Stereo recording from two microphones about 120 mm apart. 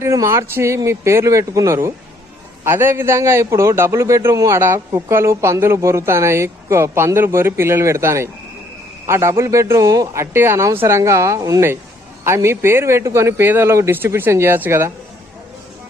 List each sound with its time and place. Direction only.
0.0 s a man's voice: 25° right (ahead or behind)